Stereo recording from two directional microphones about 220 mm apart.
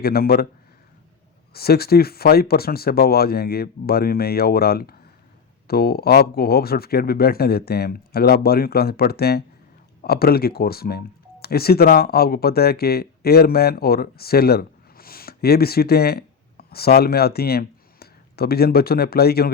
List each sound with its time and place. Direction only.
0.0 s speech: 45° left (ahead or behind)
1.5 s speech: 45° left (ahead or behind)